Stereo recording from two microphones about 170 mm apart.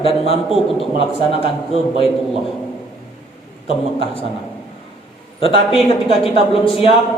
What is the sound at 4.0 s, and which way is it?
Speech, 35° left (ahead or behind).